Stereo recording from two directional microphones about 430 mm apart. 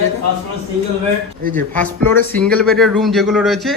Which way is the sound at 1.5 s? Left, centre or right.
Centre.